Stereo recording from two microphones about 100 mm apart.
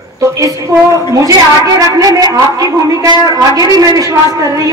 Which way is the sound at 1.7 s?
40° right (ahead or behind).